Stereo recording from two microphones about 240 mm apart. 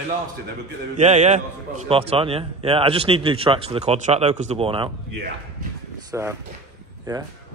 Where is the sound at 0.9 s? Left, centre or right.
Right.